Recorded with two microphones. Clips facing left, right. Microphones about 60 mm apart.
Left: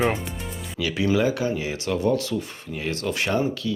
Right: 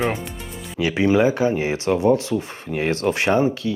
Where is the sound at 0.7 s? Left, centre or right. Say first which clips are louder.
Right 5 dB; right.